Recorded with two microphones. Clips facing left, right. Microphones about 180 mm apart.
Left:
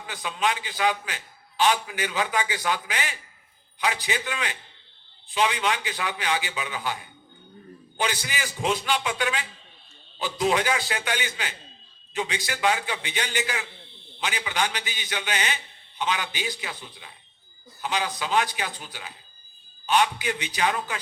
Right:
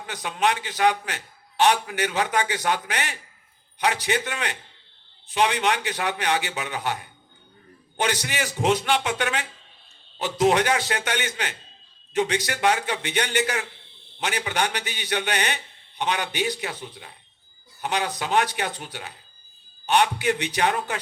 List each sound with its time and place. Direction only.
0.0 s a man's voice: 60° right (ahead or behind)
10.4 s a man's voice: 65° right (ahead or behind)
16.9 s speech: 45° right (ahead or behind)
17.9 s a man's voice: 60° right (ahead or behind)